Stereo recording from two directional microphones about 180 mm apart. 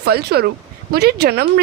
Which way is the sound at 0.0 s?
60° right (ahead or behind).